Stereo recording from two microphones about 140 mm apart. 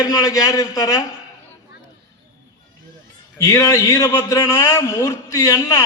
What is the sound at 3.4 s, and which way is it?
A man's voice, 25° left (ahead or behind).